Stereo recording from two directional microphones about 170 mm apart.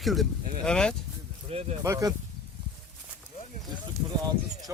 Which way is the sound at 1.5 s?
40° right (ahead or behind).